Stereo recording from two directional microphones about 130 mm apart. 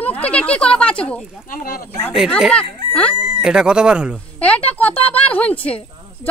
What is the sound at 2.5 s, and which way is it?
Speech, 10° left (ahead or behind).